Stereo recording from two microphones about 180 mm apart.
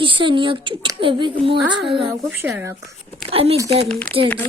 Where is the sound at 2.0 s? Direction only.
10° right (ahead or behind).